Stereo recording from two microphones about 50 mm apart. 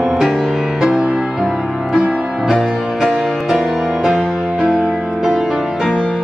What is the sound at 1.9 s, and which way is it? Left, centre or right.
Music, centre.